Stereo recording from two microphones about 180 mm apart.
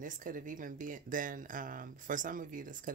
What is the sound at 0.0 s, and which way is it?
Speech, 50° right (ahead or behind).